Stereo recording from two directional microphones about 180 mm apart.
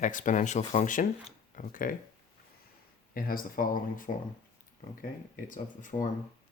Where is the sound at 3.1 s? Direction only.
55° left (ahead or behind).